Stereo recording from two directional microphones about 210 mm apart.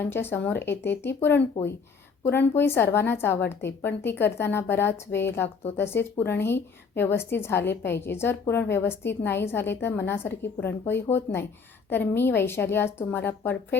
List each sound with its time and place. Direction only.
0.0 s a woman's voice: 10° left (ahead or behind)